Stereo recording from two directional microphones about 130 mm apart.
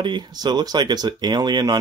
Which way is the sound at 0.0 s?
35° right (ahead or behind).